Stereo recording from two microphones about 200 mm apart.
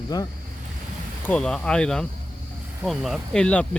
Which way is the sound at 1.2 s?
5° left (ahead or behind).